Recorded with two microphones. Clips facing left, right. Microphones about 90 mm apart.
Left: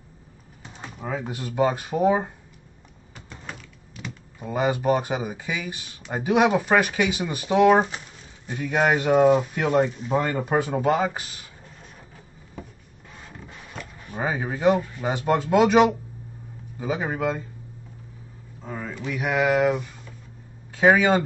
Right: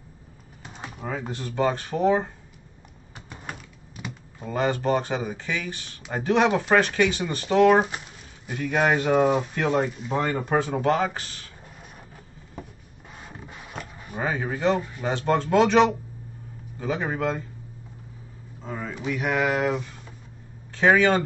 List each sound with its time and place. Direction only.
0.7 s speech: centre (ahead or behind)
3.2 s typing: 10° right (ahead or behind)
4.4 s speech: 10° left (ahead or behind)
13.2 s a sound: 15° right (ahead or behind)
14.1 s speech: 10° left (ahead or behind)
18.6 s speech: centre (ahead or behind)